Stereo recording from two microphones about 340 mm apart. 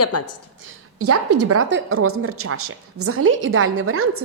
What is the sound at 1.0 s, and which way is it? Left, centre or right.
A woman's voice, right.